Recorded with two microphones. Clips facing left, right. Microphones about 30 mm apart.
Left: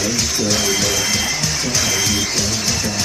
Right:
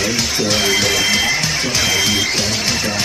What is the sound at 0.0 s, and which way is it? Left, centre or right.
Music, right.